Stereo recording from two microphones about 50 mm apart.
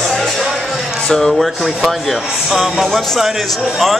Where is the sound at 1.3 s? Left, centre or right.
Centre.